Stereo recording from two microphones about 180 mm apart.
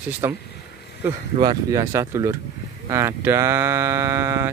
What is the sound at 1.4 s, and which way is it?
Speech, 20° right (ahead or behind).